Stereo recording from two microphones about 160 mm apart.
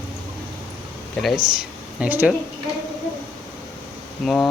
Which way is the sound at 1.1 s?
Centre (ahead or behind).